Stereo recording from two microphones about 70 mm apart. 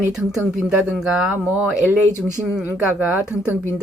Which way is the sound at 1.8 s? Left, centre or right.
Right.